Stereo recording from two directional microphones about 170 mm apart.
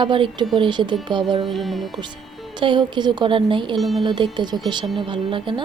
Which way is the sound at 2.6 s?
25° right (ahead or behind).